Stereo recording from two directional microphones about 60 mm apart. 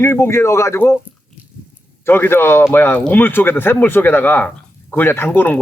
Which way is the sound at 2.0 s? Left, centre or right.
Left.